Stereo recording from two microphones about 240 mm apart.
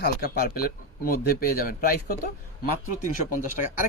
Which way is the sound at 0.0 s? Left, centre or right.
Left.